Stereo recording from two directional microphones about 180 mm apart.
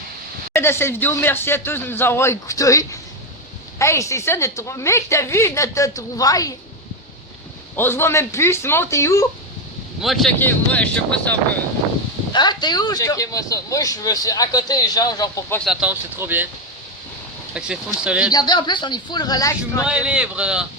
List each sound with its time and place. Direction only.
0.5 s a woman's voice: 15° left (ahead or behind)
7.8 s a woman's voice: 15° left (ahead or behind)
10.0 s a woman's voice: centre (ahead or behind)
12.3 s speech: 25° left (ahead or behind)
15.5 s speech: centre (ahead or behind)
17.5 s speech: 5° right (ahead or behind)
18.3 s speech: 25° left (ahead or behind)
19.8 s speech: 5° right (ahead or behind)